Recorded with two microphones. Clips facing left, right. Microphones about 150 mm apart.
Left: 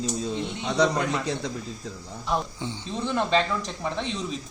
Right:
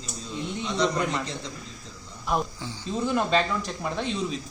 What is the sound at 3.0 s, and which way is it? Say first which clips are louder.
Speech: even; 5° right (ahead or behind).